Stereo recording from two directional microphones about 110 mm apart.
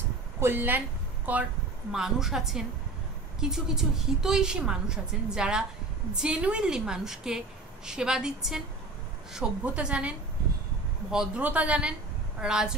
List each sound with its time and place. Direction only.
0.4 s speech: 20° right (ahead or behind)
1.9 s a woman's voice: 5° right (ahead or behind)